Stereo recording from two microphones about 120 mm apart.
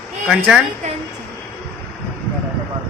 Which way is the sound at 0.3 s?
5° right (ahead or behind).